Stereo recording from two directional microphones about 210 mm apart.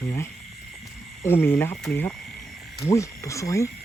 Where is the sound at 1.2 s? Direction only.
10° left (ahead or behind).